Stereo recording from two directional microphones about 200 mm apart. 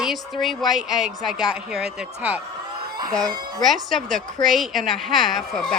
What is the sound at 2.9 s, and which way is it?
Speech, 20° right (ahead or behind).